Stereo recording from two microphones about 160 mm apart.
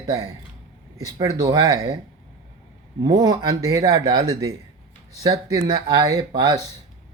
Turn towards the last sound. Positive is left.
turn(degrees=-25)  # may be behind; listen again after turning